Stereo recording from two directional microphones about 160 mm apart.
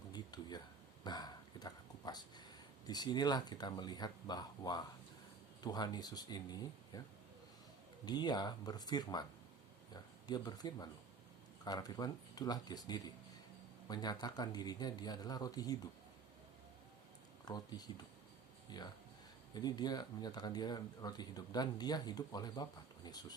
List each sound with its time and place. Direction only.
0.1 s a sound: 25° left (ahead or behind)
2.8 s speech: 25° left (ahead or behind)
8.0 s speech: 25° left (ahead or behind)
17.4 s speech: 25° left (ahead or behind)